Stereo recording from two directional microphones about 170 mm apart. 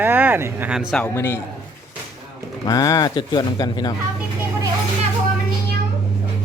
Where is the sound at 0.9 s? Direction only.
10° left (ahead or behind).